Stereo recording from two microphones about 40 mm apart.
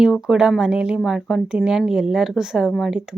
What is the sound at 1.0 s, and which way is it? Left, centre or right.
Speech, centre.